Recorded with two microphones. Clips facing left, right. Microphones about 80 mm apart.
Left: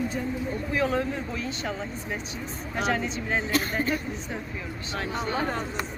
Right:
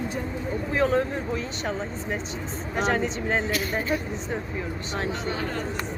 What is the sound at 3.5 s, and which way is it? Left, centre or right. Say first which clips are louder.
Speech: left 1 dB; left.